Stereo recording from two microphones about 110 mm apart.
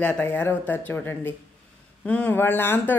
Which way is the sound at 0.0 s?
10° left (ahead or behind).